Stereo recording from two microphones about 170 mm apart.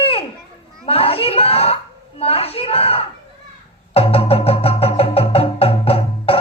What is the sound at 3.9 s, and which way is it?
Music, 35° left (ahead or behind).